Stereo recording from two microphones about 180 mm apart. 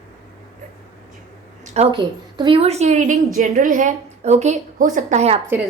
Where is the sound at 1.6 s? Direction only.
35° right (ahead or behind).